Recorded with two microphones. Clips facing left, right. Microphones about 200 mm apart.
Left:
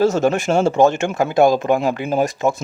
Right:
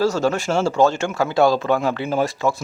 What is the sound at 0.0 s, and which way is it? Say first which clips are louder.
A man's voice: left 3 dB; 20° left (ahead or behind).